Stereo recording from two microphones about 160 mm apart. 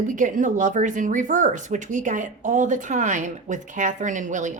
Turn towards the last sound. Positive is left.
turn(degrees=-50)  # may be behind; listen again after turning